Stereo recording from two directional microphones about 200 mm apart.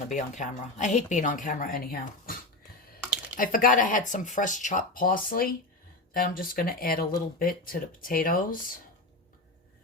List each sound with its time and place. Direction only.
0.1 s speech: 40° left (ahead or behind)
3.3 s speech: 45° left (ahead or behind)